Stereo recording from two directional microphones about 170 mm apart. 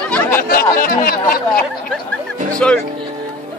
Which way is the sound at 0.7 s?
55° left (ahead or behind).